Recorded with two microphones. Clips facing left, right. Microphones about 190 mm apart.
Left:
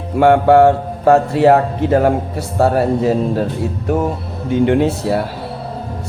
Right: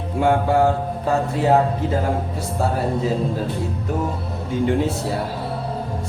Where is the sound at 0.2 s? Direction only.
70° left (ahead or behind).